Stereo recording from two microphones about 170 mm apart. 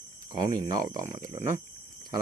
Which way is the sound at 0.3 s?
20° right (ahead or behind).